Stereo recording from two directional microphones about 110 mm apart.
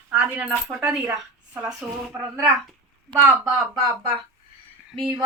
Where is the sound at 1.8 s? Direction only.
10° right (ahead or behind).